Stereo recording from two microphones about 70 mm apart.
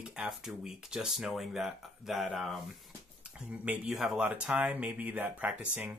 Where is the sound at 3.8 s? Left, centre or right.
Centre.